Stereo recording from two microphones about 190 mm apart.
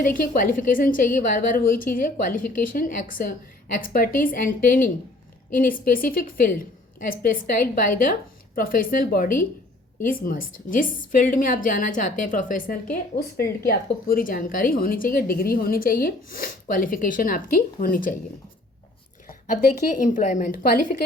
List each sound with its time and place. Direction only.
0.0 s a woman's voice: 45° left (ahead or behind)
19.9 s a woman's voice: 40° left (ahead or behind)